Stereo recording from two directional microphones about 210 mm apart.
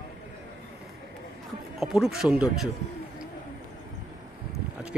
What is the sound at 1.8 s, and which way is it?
Speech, centre (ahead or behind).